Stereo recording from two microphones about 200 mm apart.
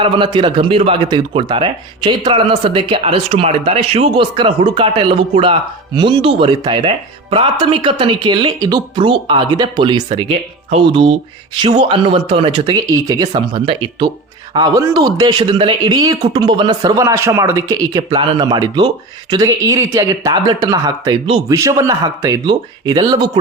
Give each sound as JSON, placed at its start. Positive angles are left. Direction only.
{"t": 0.0, "sound": "speech", "side_deg": -25}